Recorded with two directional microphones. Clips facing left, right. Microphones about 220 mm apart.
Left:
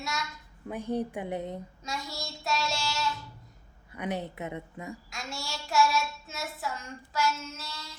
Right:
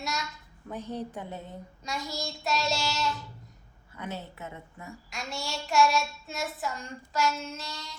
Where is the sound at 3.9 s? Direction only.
15° left (ahead or behind).